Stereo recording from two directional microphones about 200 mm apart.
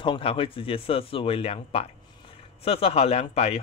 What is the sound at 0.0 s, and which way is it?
Speech, 25° left (ahead or behind).